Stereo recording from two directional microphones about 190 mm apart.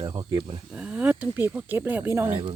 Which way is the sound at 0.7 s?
5° right (ahead or behind).